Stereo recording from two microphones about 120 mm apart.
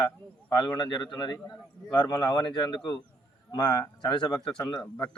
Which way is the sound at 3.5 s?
35° left (ahead or behind).